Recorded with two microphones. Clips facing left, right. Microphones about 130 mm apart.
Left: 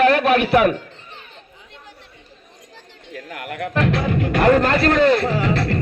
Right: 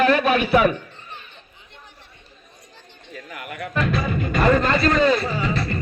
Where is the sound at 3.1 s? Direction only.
65° left (ahead or behind).